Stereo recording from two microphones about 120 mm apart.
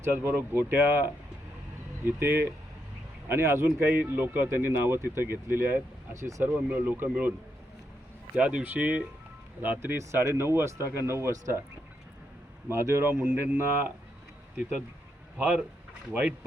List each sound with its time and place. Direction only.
0.0 s speech: 15° right (ahead or behind)
6.5 s speech: 15° right (ahead or behind)
8.4 s speech: 10° right (ahead or behind); by 11.6 s 25° right (ahead or behind)
12.6 s speech: 20° right (ahead or behind)
13.1 s speech: 10° right (ahead or behind)
15.4 s speech: 10° right (ahead or behind)